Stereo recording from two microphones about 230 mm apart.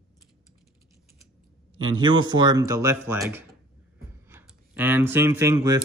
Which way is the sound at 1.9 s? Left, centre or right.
Centre.